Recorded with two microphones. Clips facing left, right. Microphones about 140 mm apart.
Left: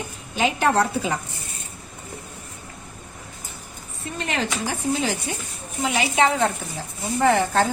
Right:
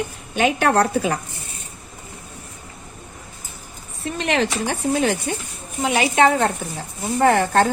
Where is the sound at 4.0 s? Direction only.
80° right; by 5.1 s 65° right (ahead or behind).